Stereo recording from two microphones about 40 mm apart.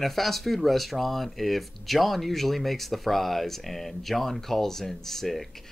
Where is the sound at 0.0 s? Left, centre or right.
Centre.